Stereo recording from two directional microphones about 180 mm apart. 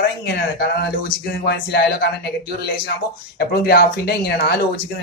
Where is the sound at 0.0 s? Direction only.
65° left (ahead or behind).